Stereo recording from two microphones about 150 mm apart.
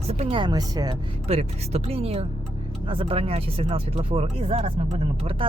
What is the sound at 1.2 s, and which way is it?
Speech, 45° right (ahead or behind).